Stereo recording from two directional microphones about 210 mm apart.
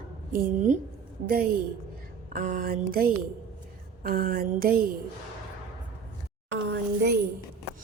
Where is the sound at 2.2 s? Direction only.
40° right (ahead or behind).